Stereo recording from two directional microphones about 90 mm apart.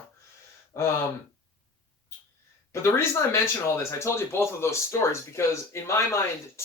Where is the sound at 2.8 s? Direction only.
30° left (ahead or behind).